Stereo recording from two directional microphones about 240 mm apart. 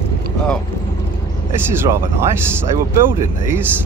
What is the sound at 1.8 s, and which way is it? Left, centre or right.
Speech, centre.